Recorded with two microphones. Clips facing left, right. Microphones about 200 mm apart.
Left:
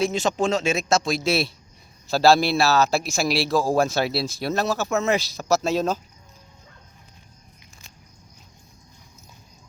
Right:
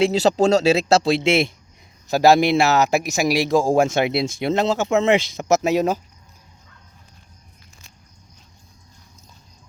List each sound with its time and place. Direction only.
0.0 s a man's voice: 35° right (ahead or behind); by 6.0 s 15° right (ahead or behind)